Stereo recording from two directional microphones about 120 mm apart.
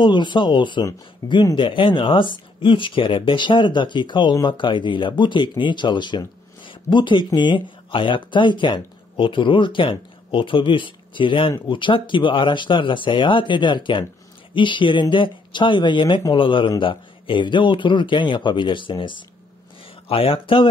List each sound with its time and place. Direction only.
0.0 s speech: 40° left (ahead or behind)